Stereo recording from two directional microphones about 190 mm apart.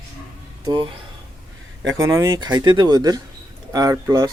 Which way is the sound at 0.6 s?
25° right (ahead or behind).